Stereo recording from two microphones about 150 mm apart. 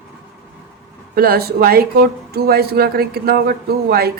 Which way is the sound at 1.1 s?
90° right.